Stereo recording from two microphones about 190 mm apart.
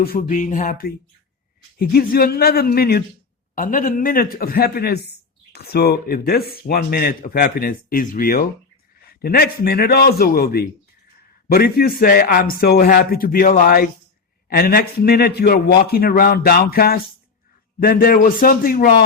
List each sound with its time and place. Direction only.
0.0 s a man's voice: 50° left (ahead or behind)